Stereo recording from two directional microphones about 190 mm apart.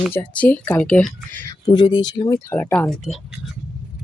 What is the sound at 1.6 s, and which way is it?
Speech, 25° left (ahead or behind).